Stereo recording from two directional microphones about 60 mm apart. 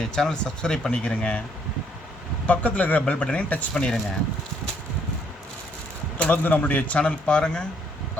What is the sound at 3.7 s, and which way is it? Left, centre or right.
Speech, centre.